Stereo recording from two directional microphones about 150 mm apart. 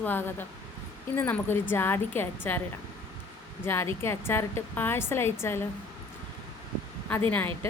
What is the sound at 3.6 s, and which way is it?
A woman's voice, 15° left (ahead or behind).